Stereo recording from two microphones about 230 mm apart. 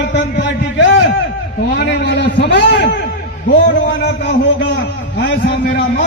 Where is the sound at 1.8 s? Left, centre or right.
Left.